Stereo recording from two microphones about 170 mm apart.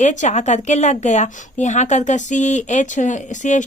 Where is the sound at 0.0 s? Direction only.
45° left (ahead or behind).